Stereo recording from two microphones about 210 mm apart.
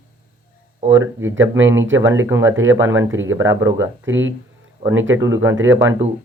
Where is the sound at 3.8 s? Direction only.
65° right (ahead or behind).